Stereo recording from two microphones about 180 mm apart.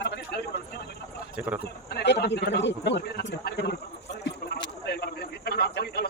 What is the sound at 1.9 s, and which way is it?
A man's voice, 65° left (ahead or behind).